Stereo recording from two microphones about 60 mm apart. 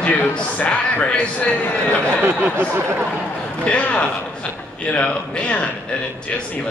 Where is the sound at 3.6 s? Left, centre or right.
Centre.